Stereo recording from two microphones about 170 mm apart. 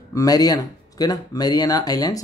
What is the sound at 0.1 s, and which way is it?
Speech, 20° left (ahead or behind).